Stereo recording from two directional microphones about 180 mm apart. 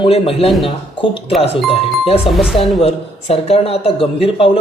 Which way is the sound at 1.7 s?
30° left (ahead or behind).